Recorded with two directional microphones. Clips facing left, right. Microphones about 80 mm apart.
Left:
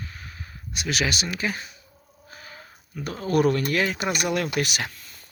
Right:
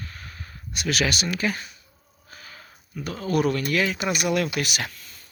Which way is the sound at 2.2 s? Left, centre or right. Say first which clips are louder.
Left 1 dB; left.